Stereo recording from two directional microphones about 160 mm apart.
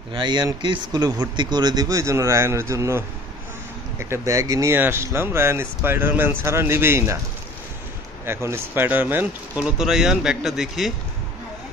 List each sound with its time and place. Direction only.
0.1 s speech: 30° right (ahead or behind)
4.0 s speech: 15° right (ahead or behind)
8.3 s speech: 15° right (ahead or behind)